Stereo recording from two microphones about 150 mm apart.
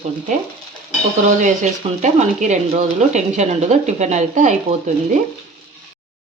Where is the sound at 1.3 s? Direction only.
55° right (ahead or behind).